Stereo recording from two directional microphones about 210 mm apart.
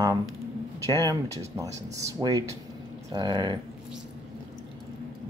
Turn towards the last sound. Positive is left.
turn(degrees=-20)  # may be behind; listen again after turning